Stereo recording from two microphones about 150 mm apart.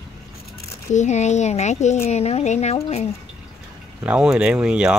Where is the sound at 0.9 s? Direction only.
50° left (ahead or behind).